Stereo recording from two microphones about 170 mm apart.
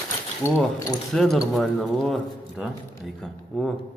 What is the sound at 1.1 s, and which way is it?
A man's voice, centre (ahead or behind).